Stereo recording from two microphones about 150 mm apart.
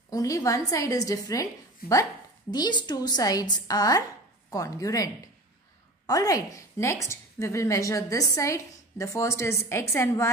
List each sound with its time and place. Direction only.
0.1 s a woman's voice: 25° left (ahead or behind)
1.8 s speech: 85° left
2.5 s a woman's voice: 30° left (ahead or behind)